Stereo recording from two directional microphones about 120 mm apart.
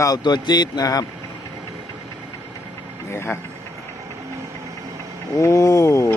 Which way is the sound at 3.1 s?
20° left (ahead or behind).